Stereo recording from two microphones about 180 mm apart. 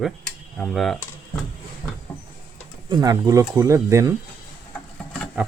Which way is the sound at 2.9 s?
20° right (ahead or behind).